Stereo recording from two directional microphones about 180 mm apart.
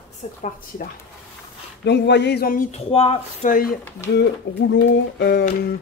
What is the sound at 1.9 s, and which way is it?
Speech, 70° left (ahead or behind).